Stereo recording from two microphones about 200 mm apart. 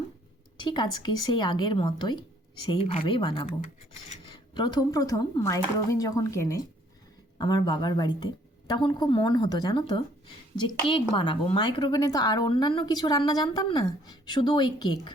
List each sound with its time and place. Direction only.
0.6 s speech: 20° left (ahead or behind)
4.5 s speech: 20° left (ahead or behind)